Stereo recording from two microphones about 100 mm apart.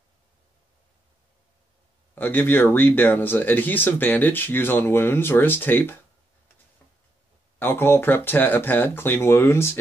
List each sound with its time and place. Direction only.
2.1 s speech: 20° left (ahead or behind)
7.5 s speech: 20° left (ahead or behind)